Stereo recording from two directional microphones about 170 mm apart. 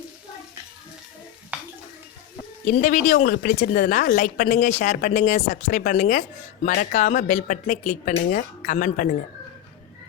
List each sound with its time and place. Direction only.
1.5 s dishes: 10° right (ahead or behind)
2.6 s speech: 50° left (ahead or behind)
3.3 s speech: 60° left (ahead or behind)